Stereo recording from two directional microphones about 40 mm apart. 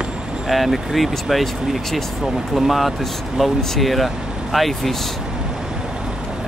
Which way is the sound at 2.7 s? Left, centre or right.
Centre.